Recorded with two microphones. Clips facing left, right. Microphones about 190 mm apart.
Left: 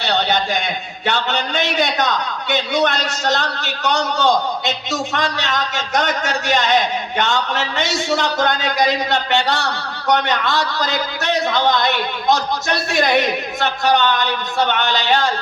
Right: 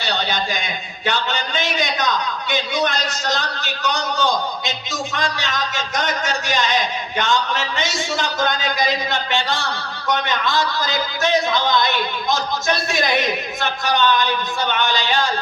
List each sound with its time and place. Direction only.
0.0 s a man's voice: 65° left (ahead or behind)